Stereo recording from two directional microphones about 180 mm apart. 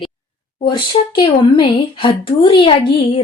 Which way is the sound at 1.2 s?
25° left (ahead or behind).